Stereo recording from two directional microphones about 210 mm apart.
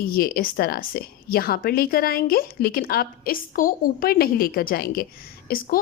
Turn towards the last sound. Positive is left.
turn(degrees=45)  # may be behind; listen again after turning